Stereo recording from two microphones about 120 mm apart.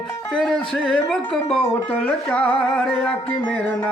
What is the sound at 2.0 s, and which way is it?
Music, 10° left (ahead or behind).